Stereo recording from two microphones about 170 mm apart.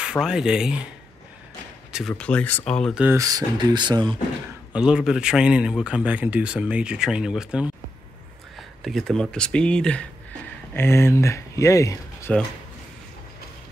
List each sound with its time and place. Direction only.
0.0 s speech: 5° right (ahead or behind)
1.9 s speech: centre (ahead or behind)
3.0 s speech: 15° right (ahead or behind)
4.7 s speech: 5° right (ahead or behind); by 12.4 s 10° left (ahead or behind)